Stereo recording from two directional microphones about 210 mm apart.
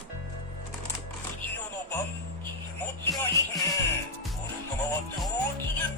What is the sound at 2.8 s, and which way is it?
Music, 5° left (ahead or behind).